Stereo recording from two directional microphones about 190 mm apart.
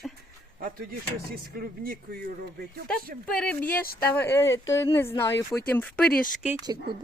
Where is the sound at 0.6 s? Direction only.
50° right (ahead or behind).